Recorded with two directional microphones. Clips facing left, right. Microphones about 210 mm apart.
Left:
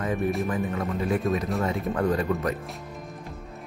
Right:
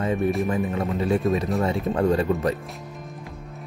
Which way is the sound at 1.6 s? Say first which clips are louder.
Right 3 dB; 30° right (ahead or behind).